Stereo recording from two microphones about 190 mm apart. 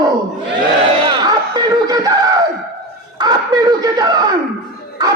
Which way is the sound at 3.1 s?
20° right (ahead or behind).